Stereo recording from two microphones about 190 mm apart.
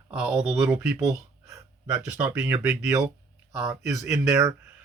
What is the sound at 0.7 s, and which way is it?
Speech, 5° right (ahead or behind).